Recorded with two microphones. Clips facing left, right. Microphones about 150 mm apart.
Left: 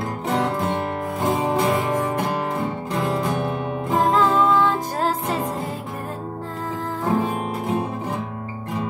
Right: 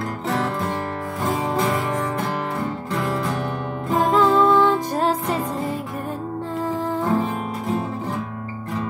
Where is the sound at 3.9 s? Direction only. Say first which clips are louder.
Right 1 dB; centre (ahead or behind).